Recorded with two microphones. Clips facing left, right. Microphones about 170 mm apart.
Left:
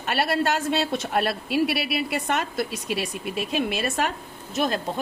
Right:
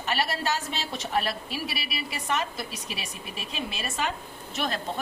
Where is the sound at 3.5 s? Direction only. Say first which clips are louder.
Left 7 dB; 60° left (ahead or behind).